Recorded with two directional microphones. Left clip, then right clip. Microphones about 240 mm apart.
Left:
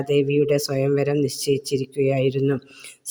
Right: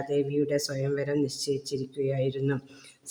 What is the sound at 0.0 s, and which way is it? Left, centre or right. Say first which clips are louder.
Speech: left 8 dB; left.